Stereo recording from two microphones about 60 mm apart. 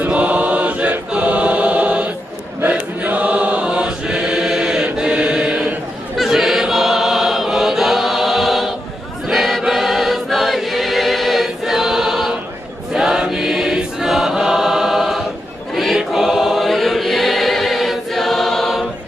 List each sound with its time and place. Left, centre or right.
0.0 s chant: right
2.6 s choir: right
6.1 s choir: centre